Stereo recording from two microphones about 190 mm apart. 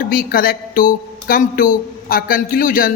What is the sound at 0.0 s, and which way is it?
A man's voice, 45° left (ahead or behind).